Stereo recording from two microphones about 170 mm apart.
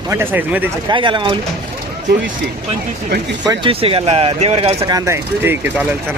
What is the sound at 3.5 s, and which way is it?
Speech, 30° right (ahead or behind).